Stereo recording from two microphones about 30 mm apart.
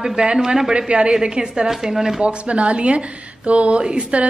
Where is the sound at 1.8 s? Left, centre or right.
Centre.